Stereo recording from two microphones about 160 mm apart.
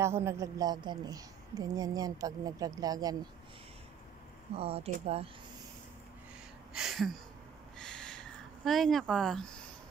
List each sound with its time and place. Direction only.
0.0 s a woman's voice: 15° right (ahead or behind)
4.6 s speech: 35° right (ahead or behind)
6.7 s a sound: centre (ahead or behind)